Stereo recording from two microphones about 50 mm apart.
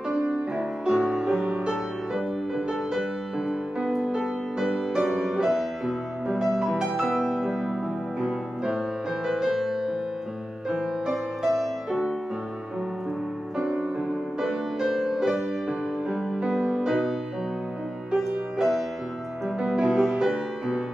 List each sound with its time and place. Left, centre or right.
0.1 s music: centre
13.6 s music: centre
16.3 s music: centre
18.1 s music: centre